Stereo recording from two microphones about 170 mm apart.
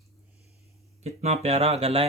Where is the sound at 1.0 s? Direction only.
40° right (ahead or behind).